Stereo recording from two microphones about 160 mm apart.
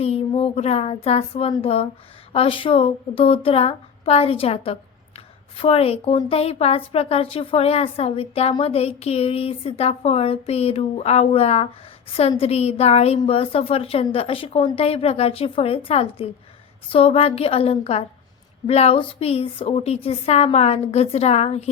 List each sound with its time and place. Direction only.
0.0 s a woman's voice: 40° left (ahead or behind)